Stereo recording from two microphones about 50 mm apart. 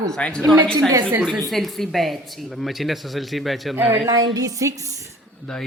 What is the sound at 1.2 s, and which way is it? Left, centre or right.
Speech, centre.